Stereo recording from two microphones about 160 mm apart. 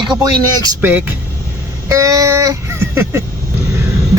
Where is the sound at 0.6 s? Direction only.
15° right (ahead or behind).